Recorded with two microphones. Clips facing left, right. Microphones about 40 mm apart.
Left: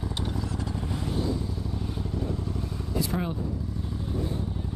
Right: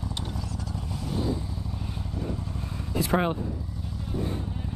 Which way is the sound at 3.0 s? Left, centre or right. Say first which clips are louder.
Right 5 dB; right.